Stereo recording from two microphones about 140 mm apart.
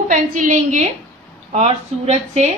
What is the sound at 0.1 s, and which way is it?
Speech, 70° right (ahead or behind).